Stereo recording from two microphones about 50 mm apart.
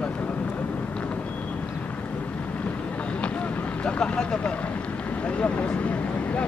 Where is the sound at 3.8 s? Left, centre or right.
Centre.